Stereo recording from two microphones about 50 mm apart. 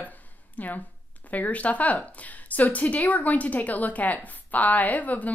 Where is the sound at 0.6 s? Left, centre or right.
Left.